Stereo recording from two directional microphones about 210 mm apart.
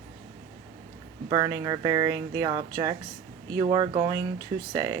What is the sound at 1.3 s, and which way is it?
A woman's voice, 20° right (ahead or behind).